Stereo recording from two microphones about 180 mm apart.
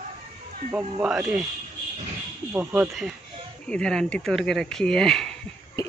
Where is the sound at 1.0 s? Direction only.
5° right (ahead or behind).